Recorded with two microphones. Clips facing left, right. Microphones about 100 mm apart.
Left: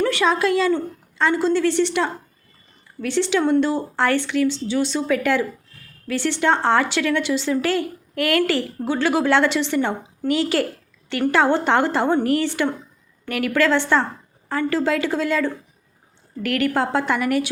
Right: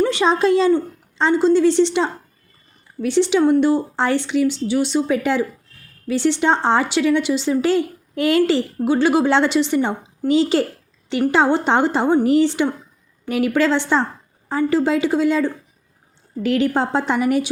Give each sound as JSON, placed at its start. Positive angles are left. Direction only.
{"t": 0.0, "sound": "a woman's voice", "side_deg": -20}